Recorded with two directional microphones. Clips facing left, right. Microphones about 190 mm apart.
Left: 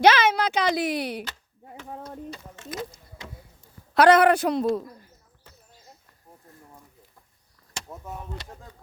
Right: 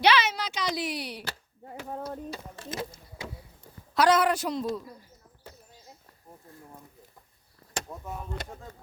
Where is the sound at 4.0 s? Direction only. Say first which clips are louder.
Left 6 dB; 60° left (ahead or behind).